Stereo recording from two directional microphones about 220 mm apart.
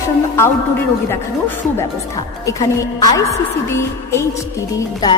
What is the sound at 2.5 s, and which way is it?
Speech, 15° left (ahead or behind).